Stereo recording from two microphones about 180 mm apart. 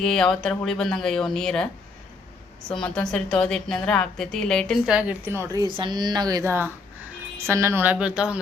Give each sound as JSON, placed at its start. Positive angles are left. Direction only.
{"t": 0.0, "sound": "a woman's voice", "side_deg": 5}
{"t": 2.6, "sound": "a woman's voice", "side_deg": 5}